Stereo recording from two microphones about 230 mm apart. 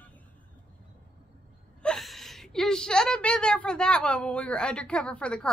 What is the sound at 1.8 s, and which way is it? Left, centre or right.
A woman's voice, centre.